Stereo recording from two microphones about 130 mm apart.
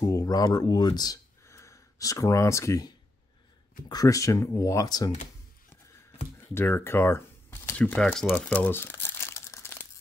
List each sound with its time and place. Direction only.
0.0 s speech: 30° left (ahead or behind)
3.9 s speech: 25° left (ahead or behind)
6.5 s speech: 20° left (ahead or behind)